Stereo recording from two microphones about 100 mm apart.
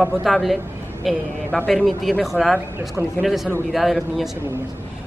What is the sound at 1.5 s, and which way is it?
Speech, 10° left (ahead or behind).